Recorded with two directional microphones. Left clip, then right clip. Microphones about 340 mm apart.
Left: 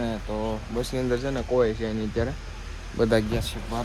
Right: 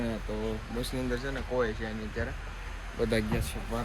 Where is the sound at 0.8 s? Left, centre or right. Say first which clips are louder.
Left 8 dB; centre.